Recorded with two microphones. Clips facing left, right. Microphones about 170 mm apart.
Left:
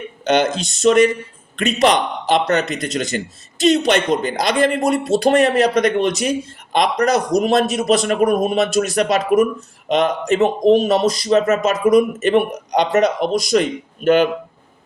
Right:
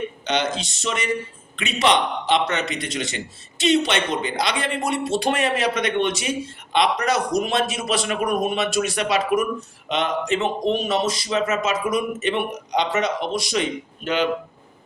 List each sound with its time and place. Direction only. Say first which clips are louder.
0.3 s speech: left 8 dB; 50° left (ahead or behind)